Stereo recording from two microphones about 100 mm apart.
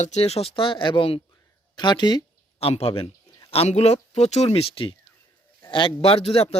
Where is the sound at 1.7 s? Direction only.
50° left (ahead or behind).